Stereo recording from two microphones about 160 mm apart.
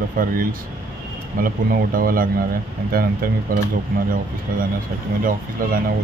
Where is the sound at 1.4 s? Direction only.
65° right (ahead or behind).